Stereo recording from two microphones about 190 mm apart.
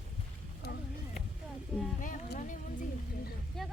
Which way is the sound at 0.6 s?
60° left (ahead or behind).